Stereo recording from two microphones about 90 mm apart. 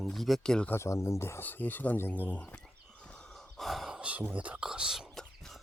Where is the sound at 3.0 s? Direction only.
10° left (ahead or behind).